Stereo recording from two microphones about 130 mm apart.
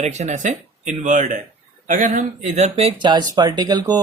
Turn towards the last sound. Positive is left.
turn(degrees=-30)  # may be behind; listen again after turning